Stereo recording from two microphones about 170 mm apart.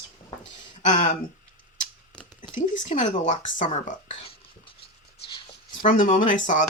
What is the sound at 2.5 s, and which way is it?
Speech, 50° left (ahead or behind).